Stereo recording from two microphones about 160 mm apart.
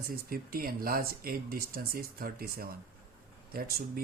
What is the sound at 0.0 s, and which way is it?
Speech, 65° right (ahead or behind).